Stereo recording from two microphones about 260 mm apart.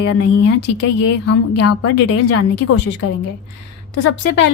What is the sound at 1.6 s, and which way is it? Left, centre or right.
A woman's voice, left.